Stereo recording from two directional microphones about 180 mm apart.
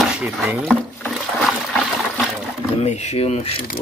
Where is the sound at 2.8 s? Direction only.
40° left (ahead or behind).